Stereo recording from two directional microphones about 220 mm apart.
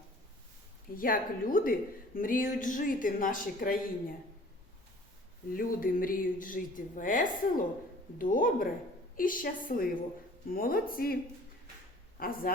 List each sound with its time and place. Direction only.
0.9 s speech: 40° left (ahead or behind)
5.5 s speech: 40° left (ahead or behind)